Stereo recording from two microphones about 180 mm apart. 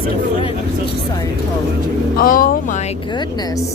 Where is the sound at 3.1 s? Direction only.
25° left (ahead or behind).